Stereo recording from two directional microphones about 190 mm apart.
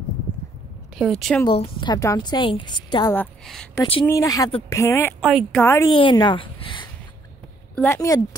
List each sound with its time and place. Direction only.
0.9 s a woman's voice: centre (ahead or behind)
1.5 s a woman's voice: 25° left (ahead or behind)
3.1 s speech: 5° left (ahead or behind)
5.2 s a woman's voice: centre (ahead or behind)
5.6 s speech: 15° left (ahead or behind)
5.9 s speech: 25° left (ahead or behind)
7.7 s speech: 10° left (ahead or behind)